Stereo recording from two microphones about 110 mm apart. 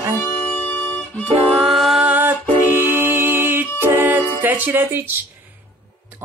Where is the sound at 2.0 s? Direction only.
15° right (ahead or behind).